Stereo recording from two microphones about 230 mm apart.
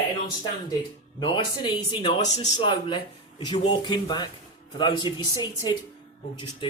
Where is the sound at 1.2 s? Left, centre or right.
Centre.